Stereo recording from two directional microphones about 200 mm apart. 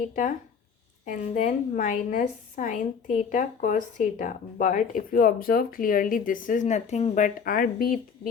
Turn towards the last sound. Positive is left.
turn(degrees=45)  # may be behind; listen again after turning